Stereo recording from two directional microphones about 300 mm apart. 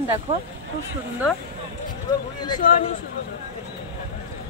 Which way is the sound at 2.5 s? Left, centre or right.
Left.